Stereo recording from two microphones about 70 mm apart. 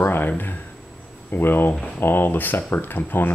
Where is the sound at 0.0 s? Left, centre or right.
Left.